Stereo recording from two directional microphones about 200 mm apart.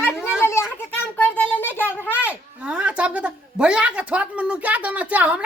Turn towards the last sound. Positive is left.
turn(degrees=-5)  # may be behind; listen again after turning